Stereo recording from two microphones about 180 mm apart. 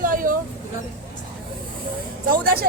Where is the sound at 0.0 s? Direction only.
50° right (ahead or behind).